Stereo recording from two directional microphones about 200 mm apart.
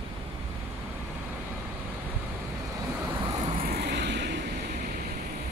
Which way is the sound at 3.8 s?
60° right (ahead or behind).